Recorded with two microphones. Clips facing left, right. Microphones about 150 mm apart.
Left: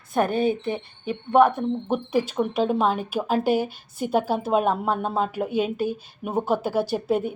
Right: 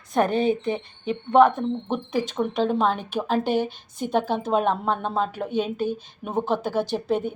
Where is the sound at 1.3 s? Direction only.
10° left (ahead or behind).